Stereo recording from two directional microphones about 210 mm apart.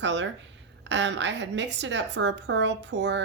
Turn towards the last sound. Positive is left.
turn(degrees=-55)  # may be behind; listen again after turning